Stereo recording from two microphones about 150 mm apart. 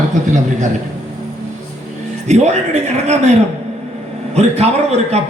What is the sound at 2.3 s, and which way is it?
A man's voice, 50° right (ahead or behind).